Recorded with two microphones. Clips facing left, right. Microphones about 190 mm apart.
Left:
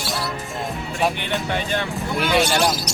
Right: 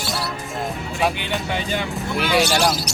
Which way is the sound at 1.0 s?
Centre (ahead or behind).